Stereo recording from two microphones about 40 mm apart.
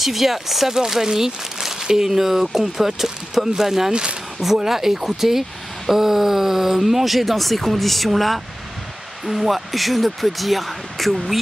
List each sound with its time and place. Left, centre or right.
0.0 s speech: centre
3.9 s speech: right
4.6 s speech: centre